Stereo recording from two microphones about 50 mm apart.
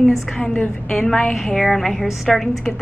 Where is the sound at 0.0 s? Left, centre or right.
Centre.